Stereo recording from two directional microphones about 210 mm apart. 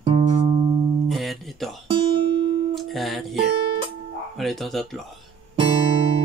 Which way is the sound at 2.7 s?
Centre (ahead or behind).